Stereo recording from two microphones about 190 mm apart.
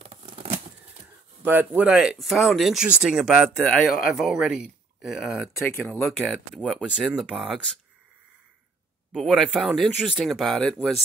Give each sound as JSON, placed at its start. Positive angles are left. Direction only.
{"t": 0.0, "sound": "a sound", "side_deg": -30}
{"t": 1.4, "sound": "speech", "side_deg": -10}
{"t": 9.1, "sound": "speech", "side_deg": 0}